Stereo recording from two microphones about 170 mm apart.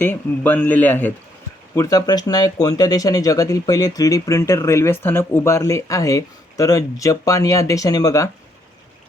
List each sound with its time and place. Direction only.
0.0 s speech: 10° left (ahead or behind)